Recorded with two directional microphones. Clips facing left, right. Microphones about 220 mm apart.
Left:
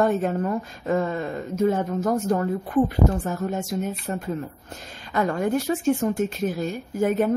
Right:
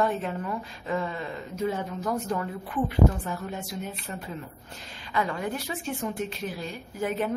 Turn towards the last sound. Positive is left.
turn(degrees=45)  # may be behind; listen again after turning